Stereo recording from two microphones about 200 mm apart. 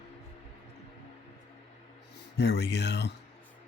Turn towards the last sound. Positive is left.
turn(degrees=60)  # may be behind; listen again after turning